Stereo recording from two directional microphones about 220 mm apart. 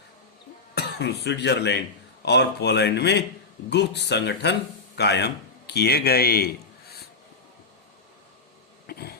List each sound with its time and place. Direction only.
0.8 s speech: 50° left (ahead or behind)
8.9 s cough: 45° left (ahead or behind)